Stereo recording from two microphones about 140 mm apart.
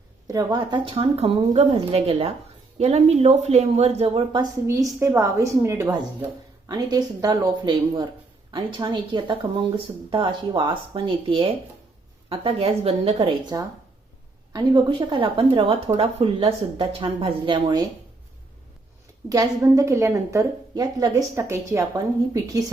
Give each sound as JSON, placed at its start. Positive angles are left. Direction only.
{"t": 0.3, "sound": "speech", "side_deg": -25}
{"t": 4.6, "sound": "a woman's voice", "side_deg": -20}
{"t": 13.5, "sound": "a woman's voice", "side_deg": -25}
{"t": 19.3, "sound": "a woman's voice", "side_deg": -25}